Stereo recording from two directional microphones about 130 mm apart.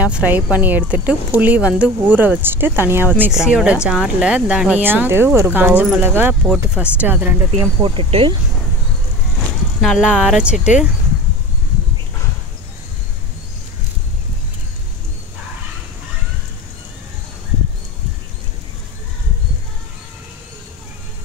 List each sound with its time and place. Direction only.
0.0 s speech: 10° right (ahead or behind)
3.3 s speech: 5° right (ahead or behind)
6.4 s speech: 5° right (ahead or behind)
7.8 s speech: 45° right (ahead or behind)
9.8 s speech: 5° right (ahead or behind)